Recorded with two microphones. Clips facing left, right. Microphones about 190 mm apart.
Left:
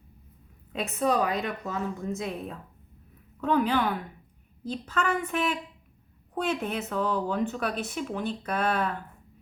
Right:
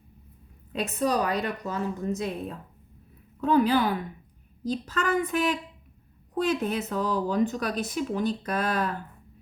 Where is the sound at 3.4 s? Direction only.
35° right (ahead or behind).